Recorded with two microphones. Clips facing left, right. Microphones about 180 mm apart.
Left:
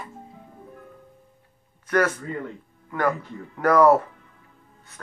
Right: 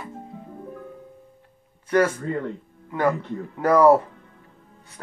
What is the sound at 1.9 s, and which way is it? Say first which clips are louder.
Speech: right 2 dB; 30° right (ahead or behind).